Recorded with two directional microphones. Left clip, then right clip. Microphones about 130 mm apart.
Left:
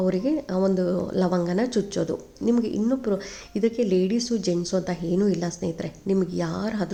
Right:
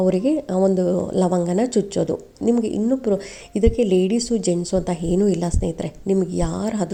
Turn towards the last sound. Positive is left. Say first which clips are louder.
# right 4 dB
turn(degrees=-30)  # may be behind; listen again after turning